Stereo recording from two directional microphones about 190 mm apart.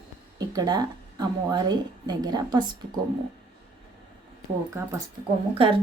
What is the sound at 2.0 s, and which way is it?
Speech, 20° right (ahead or behind).